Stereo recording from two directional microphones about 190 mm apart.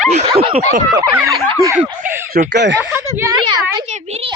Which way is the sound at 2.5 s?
70° right (ahead or behind).